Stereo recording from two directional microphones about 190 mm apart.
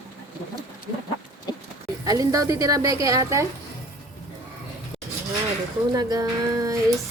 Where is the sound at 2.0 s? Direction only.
20° right (ahead or behind).